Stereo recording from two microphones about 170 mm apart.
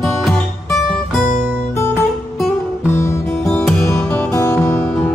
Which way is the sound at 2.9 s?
15° left (ahead or behind).